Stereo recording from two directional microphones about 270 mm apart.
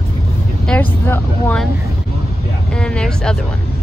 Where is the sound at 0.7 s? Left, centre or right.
Centre.